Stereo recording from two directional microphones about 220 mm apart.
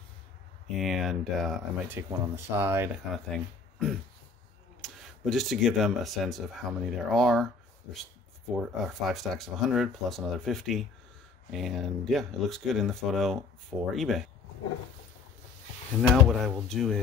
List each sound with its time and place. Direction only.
0.7 s speech: centre (ahead or behind)
2.0 s speech: 10° right (ahead or behind)
3.3 s speech: centre (ahead or behind)
8.5 s speech: centre (ahead or behind)
16.0 s speech: centre (ahead or behind)